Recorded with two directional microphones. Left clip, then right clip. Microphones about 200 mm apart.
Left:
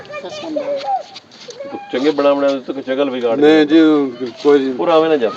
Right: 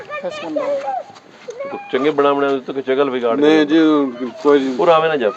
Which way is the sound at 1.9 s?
50° right (ahead or behind).